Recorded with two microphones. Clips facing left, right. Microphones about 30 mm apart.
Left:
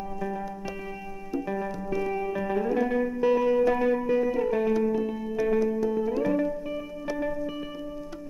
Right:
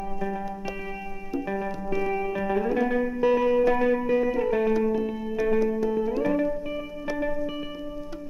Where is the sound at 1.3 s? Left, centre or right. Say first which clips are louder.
Right 1 dB; centre.